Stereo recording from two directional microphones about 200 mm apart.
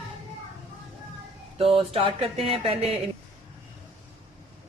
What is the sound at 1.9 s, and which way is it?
A woman's voice, 30° right (ahead or behind).